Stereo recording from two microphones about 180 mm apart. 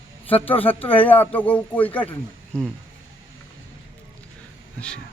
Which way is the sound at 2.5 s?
10° right (ahead or behind).